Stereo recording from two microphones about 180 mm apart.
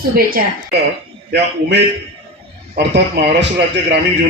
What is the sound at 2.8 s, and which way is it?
Speech, 65° right (ahead or behind).